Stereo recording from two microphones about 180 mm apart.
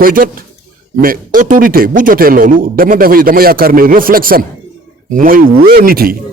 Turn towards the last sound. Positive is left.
turn(degrees=-55)  # may be behind; listen again after turning